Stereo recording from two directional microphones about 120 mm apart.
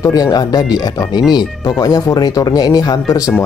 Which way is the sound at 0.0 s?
35° left (ahead or behind).